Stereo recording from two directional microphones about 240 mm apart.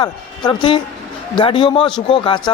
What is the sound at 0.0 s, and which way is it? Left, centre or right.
A man's voice, centre.